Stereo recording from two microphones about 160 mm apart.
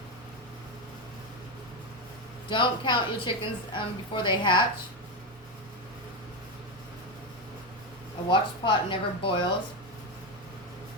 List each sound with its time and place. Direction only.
2.5 s a woman's voice: 30° left (ahead or behind)
8.3 s a woman's voice: 30° left (ahead or behind)